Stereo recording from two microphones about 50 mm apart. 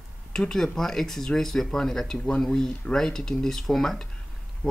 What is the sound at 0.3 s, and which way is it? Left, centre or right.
Speech, centre.